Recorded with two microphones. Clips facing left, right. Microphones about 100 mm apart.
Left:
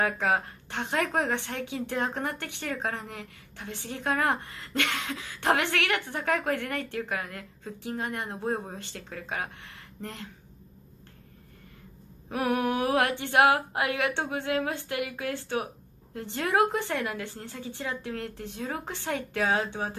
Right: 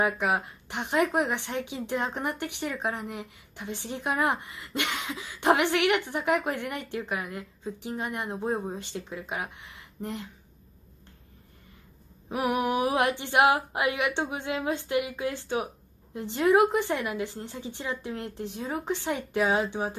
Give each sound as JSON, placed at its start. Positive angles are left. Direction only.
{"t": 0.0, "sound": "a woman's voice", "side_deg": -15}
{"t": 12.3, "sound": "a woman's voice", "side_deg": -20}